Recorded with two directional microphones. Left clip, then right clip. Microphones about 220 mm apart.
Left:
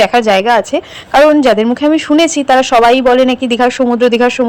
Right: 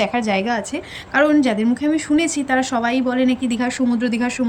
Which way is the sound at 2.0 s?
5° left (ahead or behind).